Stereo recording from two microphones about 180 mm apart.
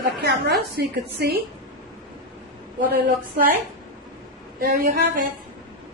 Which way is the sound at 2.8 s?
55° right (ahead or behind).